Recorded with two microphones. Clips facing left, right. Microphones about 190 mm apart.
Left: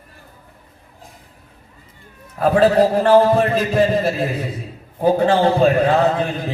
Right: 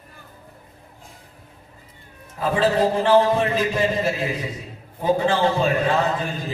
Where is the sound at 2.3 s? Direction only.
65° left (ahead or behind).